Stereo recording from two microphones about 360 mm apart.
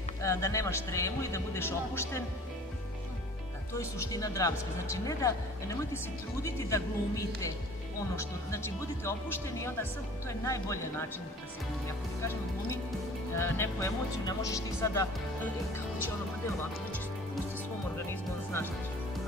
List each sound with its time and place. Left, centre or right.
0.2 s speech: centre
3.7 s speech: centre
10.2 s speech: centre
13.4 s speech: centre
18.1 s music: centre